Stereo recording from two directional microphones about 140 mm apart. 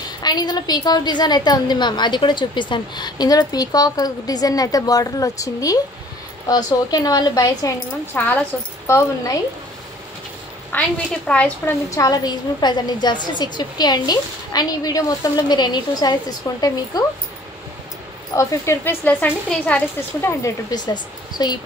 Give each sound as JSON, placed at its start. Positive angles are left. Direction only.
{"t": 0.2, "sound": "a woman's voice", "side_deg": 30}
{"t": 8.1, "sound": "speech", "side_deg": 15}
{"t": 10.7, "sound": "speech", "side_deg": 10}
{"t": 11.9, "sound": "a woman's voice", "side_deg": 25}
{"t": 18.3, "sound": "speech", "side_deg": 25}
{"t": 20.2, "sound": "a woman's voice", "side_deg": 20}
{"t": 20.7, "sound": "a woman's voice", "side_deg": 30}